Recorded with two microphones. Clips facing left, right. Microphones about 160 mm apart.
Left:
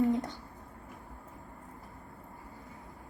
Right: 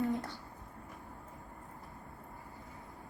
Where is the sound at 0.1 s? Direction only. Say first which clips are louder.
Left 5 dB; 20° left (ahead or behind).